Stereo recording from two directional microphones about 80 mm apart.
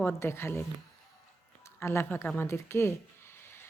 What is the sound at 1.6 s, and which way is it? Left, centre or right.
A woman's voice, left.